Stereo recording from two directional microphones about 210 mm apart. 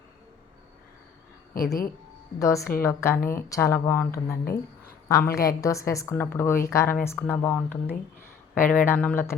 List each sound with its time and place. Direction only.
1.5 s speech: 45° left (ahead or behind)
2.4 s a woman's voice: 15° left (ahead or behind)